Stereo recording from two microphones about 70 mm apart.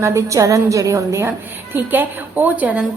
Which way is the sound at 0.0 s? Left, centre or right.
Right.